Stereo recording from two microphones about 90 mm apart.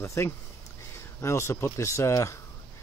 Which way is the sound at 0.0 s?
30° left (ahead or behind).